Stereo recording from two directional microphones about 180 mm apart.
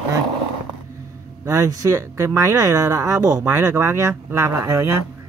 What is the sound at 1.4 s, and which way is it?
Speech, 20° right (ahead or behind).